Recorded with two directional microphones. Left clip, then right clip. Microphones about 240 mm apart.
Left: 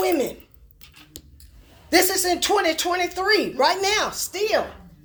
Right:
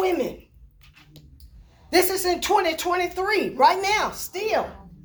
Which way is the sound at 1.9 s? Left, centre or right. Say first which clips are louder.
Left 2 dB; left.